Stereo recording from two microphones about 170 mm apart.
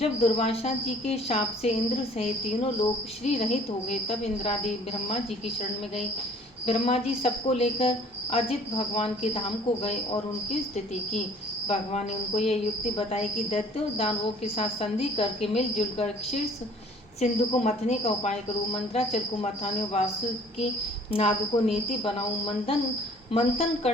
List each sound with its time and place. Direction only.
0.0 s speech: 35° left (ahead or behind)
6.7 s speech: 35° left (ahead or behind)
11.7 s speech: 40° left (ahead or behind)
21.1 s speech: 35° left (ahead or behind)